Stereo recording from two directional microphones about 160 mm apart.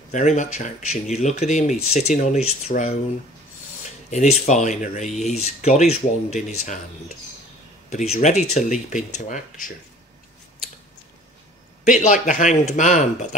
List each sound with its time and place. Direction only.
0.1 s speech: 50° left (ahead or behind)
7.9 s speech: 45° left (ahead or behind)
11.8 s speech: 50° left (ahead or behind)